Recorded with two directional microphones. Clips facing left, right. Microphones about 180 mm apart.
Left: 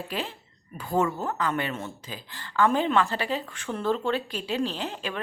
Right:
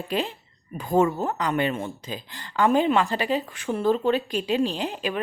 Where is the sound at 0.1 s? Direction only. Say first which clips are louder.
Right 6 dB; 20° right (ahead or behind).